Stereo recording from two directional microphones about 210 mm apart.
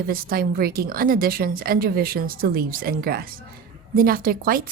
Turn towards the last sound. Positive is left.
turn(degrees=-45)  # may be behind; listen again after turning